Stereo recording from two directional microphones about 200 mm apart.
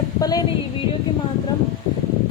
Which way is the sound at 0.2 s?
20° left (ahead or behind).